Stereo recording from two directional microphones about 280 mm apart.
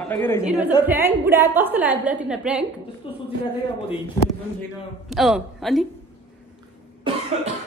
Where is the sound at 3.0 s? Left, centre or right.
Centre.